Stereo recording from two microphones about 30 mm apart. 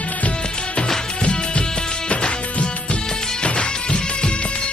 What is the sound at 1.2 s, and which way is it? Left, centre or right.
Music, left.